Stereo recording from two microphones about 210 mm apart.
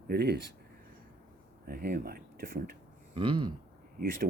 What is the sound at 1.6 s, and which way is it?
Speech, 45° right (ahead or behind).